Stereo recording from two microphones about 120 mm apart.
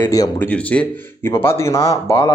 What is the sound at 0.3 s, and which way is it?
Speech, 15° left (ahead or behind).